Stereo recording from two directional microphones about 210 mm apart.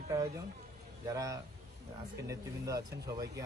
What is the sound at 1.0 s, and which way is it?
A man's voice, 15° right (ahead or behind).